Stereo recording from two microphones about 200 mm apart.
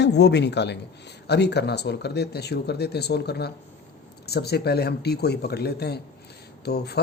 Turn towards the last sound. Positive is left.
turn(degrees=55)  # may be behind; listen again after turning